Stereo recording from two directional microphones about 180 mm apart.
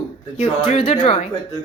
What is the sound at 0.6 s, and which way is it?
Speech, 30° left (ahead or behind).